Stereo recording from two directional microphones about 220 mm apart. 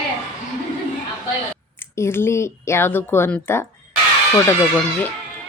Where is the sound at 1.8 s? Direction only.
10° left (ahead or behind).